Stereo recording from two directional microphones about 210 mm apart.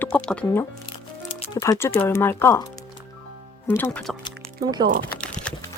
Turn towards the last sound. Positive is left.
turn(degrees=5)  # may be behind; listen again after turning